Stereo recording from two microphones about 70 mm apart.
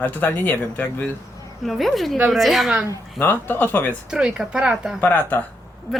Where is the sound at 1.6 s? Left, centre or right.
Centre.